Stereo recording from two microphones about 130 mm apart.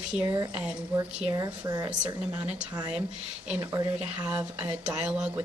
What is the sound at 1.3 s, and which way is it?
Speech, 30° right (ahead or behind).